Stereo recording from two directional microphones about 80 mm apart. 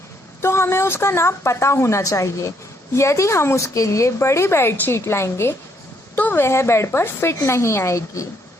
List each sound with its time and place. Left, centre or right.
0.4 s a woman's voice: left